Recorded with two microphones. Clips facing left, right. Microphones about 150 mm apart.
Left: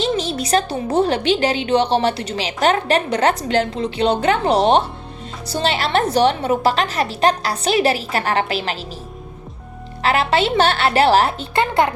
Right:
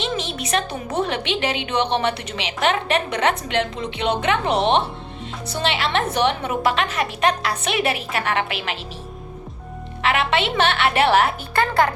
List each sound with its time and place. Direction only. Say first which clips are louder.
0.0 s a woman's voice: left 6 dB; 35° left (ahead or behind)
10.0 s a woman's voice: left 3 dB; 35° left (ahead or behind)